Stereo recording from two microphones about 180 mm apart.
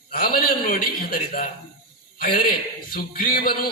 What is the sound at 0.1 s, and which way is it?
A man's voice, 55° left (ahead or behind).